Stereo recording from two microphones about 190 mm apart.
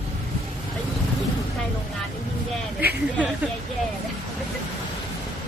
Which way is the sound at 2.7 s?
10° right (ahead or behind).